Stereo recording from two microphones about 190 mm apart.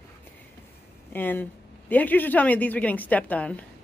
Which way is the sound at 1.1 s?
10° left (ahead or behind).